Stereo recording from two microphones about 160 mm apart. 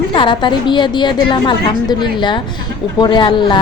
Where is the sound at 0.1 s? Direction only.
30° left (ahead or behind).